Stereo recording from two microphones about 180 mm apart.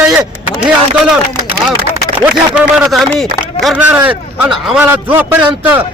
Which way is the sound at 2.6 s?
5° right (ahead or behind).